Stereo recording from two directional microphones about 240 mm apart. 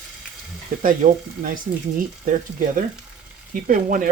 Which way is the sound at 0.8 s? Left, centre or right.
Right.